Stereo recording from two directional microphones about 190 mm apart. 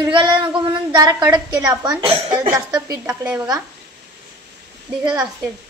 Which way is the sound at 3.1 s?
5° right (ahead or behind).